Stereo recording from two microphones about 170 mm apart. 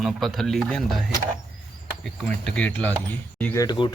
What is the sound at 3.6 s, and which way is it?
Speech, 25° left (ahead or behind).